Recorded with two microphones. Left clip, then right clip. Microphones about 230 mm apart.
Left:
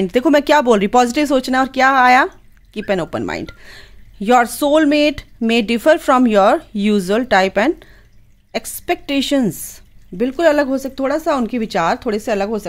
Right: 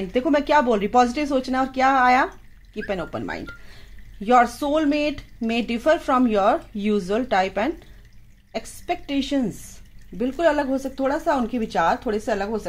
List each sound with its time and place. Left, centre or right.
0.1 s speech: left